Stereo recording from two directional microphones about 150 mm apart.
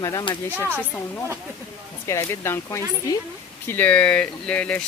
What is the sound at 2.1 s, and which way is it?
Speech, 20° left (ahead or behind).